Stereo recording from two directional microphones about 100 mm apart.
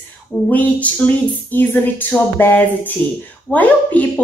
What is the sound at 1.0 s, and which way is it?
A woman's voice, 10° left (ahead or behind).